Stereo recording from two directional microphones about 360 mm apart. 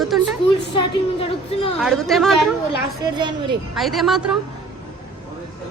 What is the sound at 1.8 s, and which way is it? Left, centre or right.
Speech, centre.